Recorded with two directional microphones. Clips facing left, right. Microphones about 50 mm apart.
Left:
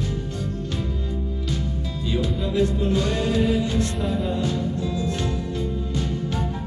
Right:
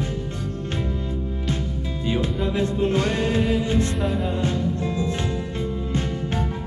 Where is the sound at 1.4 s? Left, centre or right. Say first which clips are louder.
Right 1 dB; right.